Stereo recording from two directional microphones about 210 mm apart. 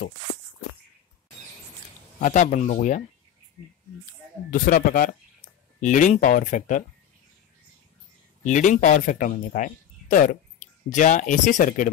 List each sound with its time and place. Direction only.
2.1 s speech: 35° left (ahead or behind)
4.5 s speech: 40° left (ahead or behind)
8.5 s speech: 35° left (ahead or behind)